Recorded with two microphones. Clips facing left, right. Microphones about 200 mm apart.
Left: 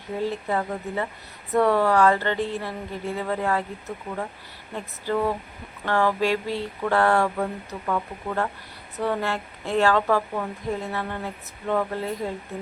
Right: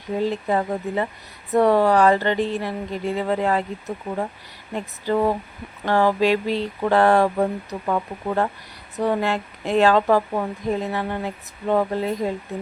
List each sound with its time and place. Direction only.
0.2 s speech: 20° right (ahead or behind)
7.3 s speech: 30° right (ahead or behind)